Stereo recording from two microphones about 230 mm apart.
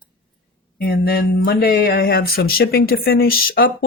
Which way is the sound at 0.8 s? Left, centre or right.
Left.